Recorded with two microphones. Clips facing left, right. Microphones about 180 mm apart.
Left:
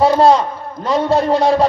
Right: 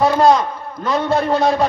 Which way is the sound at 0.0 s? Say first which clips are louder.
Left 2 dB; 35° left (ahead or behind).